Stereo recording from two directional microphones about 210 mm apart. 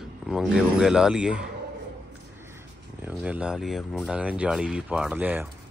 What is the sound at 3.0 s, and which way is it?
Speech, 5° right (ahead or behind).